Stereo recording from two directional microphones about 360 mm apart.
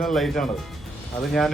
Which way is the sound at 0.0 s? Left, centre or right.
Centre.